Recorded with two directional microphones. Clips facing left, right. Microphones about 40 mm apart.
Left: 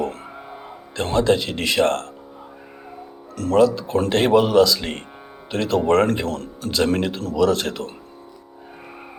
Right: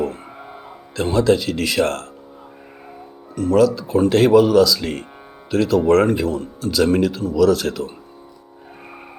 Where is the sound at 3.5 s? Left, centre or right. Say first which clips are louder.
Right 1 dB; left.